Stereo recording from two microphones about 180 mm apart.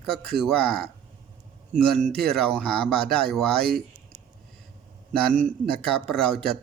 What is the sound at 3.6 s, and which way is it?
Speech, 60° right (ahead or behind).